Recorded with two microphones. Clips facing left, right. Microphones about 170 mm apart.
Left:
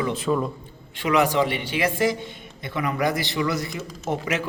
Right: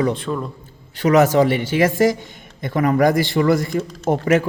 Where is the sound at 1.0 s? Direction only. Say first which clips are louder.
Right 7 dB; 40° right (ahead or behind).